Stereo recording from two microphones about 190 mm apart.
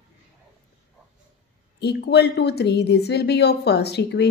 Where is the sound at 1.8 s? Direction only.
60° left (ahead or behind).